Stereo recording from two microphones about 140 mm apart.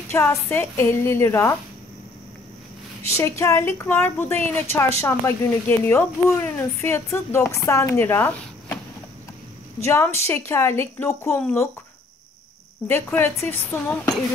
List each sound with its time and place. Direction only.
0.1 s a woman's voice: 20° left (ahead or behind)
3.2 s a woman's voice: 20° left (ahead or behind)
9.8 s speech: 20° left (ahead or behind)
12.8 s a woman's voice: 15° left (ahead or behind)